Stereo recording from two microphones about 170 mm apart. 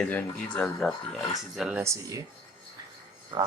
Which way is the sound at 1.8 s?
20° right (ahead or behind).